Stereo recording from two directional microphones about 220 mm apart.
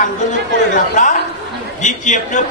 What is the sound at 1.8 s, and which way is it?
Speech, 35° left (ahead or behind).